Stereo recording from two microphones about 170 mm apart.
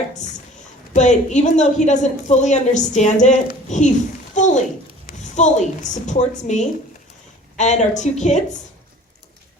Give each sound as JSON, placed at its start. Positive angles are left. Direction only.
{"t": 0.9, "sound": "a woman's voice", "side_deg": 45}
{"t": 4.4, "sound": "a sound", "side_deg": 45}
{"t": 5.0, "sound": "a woman's voice", "side_deg": 45}